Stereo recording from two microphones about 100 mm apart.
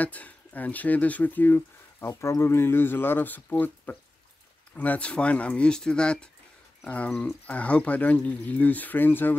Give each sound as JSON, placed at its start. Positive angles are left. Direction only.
{"t": 0.0, "sound": "speech", "side_deg": 15}